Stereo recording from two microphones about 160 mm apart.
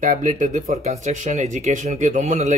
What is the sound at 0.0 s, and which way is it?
Speech, 50° right (ahead or behind).